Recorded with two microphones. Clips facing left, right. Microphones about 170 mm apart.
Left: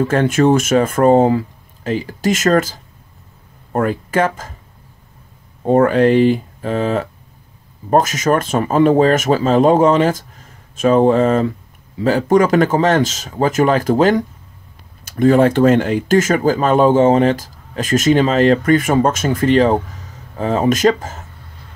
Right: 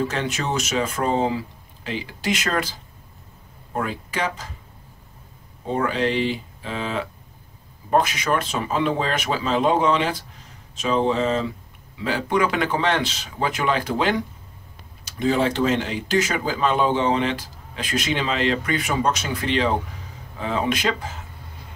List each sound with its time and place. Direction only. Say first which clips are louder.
0.0 s speech: left 12 dB; 50° left (ahead or behind)
5.6 s speech: left 11 dB; 50° left (ahead or behind)